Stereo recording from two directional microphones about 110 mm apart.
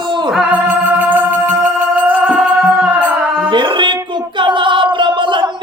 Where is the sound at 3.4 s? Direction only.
50° right (ahead or behind).